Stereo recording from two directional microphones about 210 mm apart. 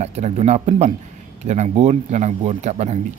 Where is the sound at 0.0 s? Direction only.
30° right (ahead or behind).